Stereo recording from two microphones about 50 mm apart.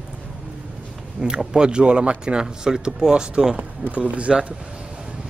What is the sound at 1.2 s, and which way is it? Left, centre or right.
Speech, centre.